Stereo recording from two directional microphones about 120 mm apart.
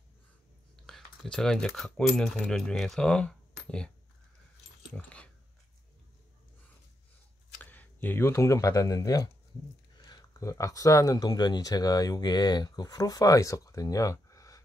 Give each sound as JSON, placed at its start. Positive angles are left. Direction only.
{"t": 0.8, "sound": "speech", "side_deg": 0}
{"t": 4.9, "sound": "speech", "side_deg": 10}
{"t": 7.7, "sound": "speech", "side_deg": 15}